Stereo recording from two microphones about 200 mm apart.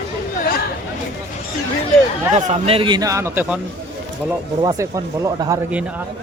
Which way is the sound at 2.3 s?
30° right (ahead or behind).